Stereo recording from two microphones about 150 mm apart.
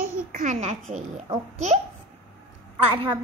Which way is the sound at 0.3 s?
55° right (ahead or behind).